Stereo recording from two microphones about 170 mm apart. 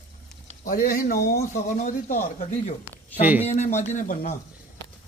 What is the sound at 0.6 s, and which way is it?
Speech, 55° left (ahead or behind).